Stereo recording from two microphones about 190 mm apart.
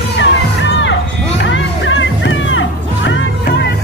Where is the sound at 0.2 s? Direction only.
75° left (ahead or behind).